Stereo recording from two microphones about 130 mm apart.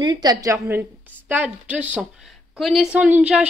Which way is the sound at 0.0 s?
30° right (ahead or behind).